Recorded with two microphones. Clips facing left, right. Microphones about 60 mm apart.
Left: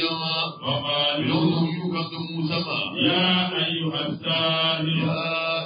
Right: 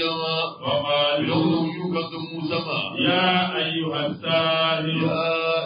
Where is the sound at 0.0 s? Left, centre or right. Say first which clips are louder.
Right 2 dB; centre.